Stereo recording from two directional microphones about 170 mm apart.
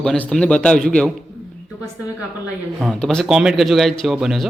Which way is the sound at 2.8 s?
5° left (ahead or behind).